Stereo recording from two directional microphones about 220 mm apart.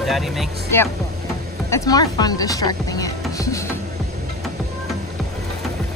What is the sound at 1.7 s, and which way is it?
Speech, 15° left (ahead or behind).